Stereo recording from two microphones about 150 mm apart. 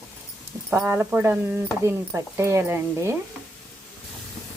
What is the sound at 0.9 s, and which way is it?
Speech, 15° right (ahead or behind).